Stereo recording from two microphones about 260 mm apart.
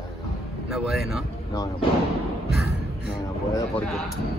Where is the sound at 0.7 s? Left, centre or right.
Centre.